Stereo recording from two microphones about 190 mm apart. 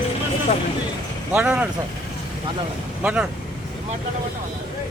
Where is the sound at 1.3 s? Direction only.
5° right (ahead or behind).